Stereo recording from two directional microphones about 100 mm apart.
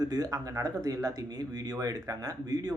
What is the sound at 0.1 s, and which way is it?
Speech, 35° right (ahead or behind).